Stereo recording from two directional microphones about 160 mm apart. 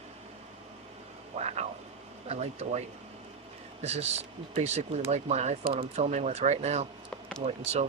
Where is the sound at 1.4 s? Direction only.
45° right (ahead or behind).